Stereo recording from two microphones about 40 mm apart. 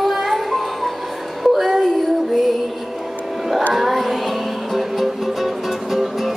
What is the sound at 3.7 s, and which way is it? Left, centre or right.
Music, centre.